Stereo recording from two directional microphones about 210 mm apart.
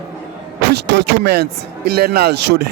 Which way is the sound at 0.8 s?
55° right (ahead or behind).